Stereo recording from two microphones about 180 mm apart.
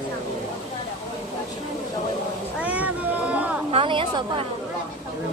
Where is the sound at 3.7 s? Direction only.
30° right (ahead or behind).